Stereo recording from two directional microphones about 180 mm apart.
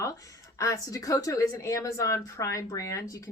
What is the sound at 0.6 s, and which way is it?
Speech, 20° left (ahead or behind).